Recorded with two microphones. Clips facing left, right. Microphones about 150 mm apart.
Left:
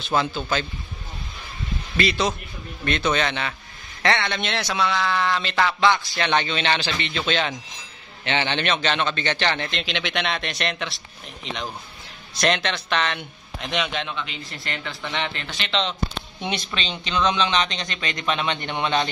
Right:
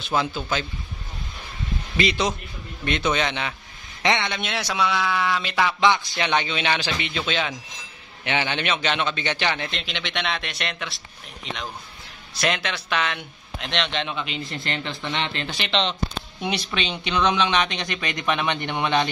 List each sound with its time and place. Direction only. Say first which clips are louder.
0.0 s speech: left 1 dB; 10° right (ahead or behind)
2.0 s a man's voice: even; 15° right (ahead or behind); by 14.0 s 5° left (ahead or behind)
14.2 s a man's voice: right 4 dB; 25° right (ahead or behind)
16.3 s speech: right 2 dB; 10° right (ahead or behind)